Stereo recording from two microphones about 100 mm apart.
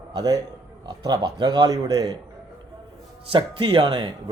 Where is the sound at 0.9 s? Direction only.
45° right (ahead or behind).